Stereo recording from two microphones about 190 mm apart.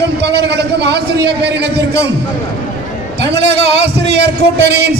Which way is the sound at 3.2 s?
65° right (ahead or behind).